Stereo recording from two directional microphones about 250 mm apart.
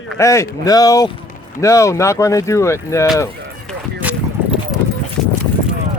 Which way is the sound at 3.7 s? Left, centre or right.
Centre.